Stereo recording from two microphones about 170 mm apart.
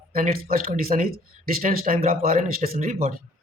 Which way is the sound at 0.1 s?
55° right (ahead or behind).